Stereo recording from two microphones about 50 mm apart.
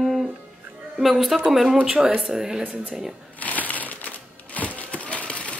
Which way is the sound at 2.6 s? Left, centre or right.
Right.